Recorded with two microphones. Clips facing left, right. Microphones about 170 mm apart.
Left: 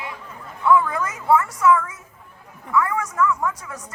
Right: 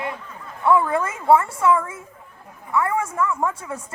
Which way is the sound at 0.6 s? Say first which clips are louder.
Even; 30° right (ahead or behind).